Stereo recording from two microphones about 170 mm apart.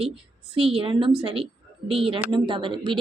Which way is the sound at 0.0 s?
35° right (ahead or behind).